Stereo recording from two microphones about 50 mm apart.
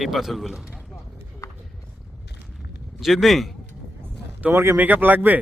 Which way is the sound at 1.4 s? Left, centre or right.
Left.